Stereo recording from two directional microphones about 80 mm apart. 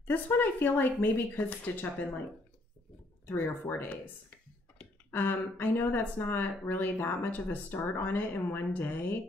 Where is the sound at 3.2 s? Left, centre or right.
Left.